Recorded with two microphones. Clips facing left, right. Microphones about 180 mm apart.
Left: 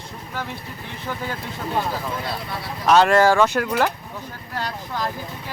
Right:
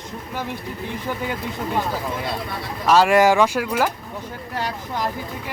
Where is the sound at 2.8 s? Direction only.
5° right (ahead or behind).